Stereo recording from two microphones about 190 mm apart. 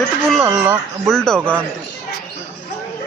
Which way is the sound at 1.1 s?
5° left (ahead or behind).